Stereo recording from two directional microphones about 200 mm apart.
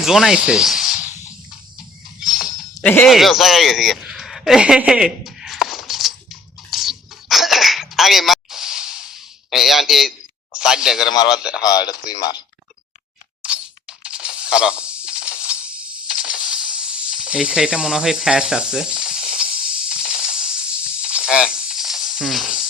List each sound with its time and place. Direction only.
0.0 s speech: centre (ahead or behind)
2.2 s chink: centre (ahead or behind)
2.8 s a sound: 10° left (ahead or behind)
6.7 s throat clearing: centre (ahead or behind)
10.6 s speech: 5° right (ahead or behind)
11.6 s speech: 20° left (ahead or behind)
13.4 s a sound: 5° right (ahead or behind)
16.0 s snake: 5° right (ahead or behind)
20.0 s a sound: 5° right (ahead or behind)
21.0 s snake: 5° right (ahead or behind)